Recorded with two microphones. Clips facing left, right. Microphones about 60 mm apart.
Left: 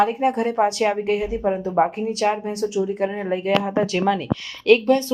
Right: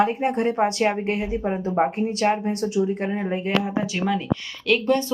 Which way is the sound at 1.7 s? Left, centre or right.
Centre.